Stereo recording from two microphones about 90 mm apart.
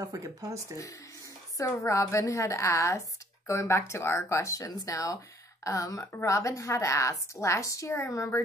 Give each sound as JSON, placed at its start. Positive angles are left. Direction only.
{"t": 0.0, "sound": "speech", "side_deg": -40}
{"t": 1.6, "sound": "speech", "side_deg": 35}